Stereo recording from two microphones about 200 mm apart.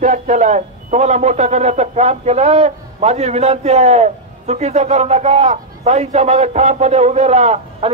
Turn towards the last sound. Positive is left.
turn(degrees=-35)  # may be behind; listen again after turning